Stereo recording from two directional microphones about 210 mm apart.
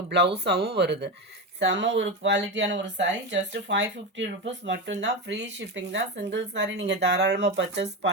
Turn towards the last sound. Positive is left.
turn(degrees=-55)  # may be behind; listen again after turning